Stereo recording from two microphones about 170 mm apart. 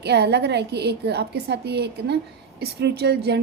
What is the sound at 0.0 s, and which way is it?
A woman's voice, 75° right (ahead or behind).